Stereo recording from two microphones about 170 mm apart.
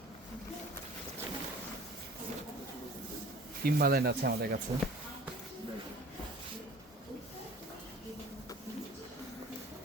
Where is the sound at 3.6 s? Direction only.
65° right (ahead or behind).